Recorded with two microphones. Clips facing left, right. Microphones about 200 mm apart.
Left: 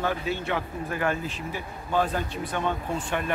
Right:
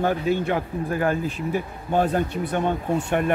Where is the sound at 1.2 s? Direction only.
50° right (ahead or behind).